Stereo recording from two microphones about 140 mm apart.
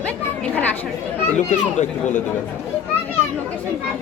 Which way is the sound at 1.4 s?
60° left (ahead or behind).